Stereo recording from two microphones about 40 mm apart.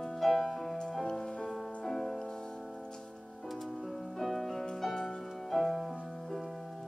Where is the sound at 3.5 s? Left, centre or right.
Centre.